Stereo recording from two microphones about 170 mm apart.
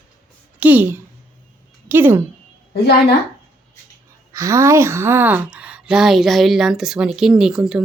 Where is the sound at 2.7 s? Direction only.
75° left (ahead or behind).